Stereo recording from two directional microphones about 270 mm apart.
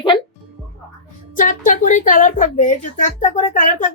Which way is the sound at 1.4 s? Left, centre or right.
Left.